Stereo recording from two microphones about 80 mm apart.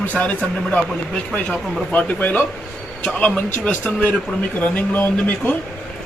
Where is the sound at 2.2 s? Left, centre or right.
Left.